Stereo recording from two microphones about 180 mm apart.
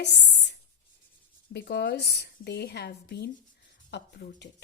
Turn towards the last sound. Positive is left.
turn(degrees=75)  # may be behind; listen again after turning